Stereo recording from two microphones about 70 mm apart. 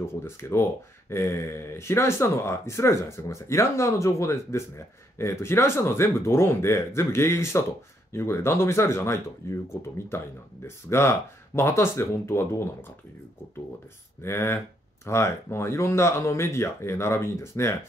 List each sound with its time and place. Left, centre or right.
0.0 s speech: left
14.2 s speech: left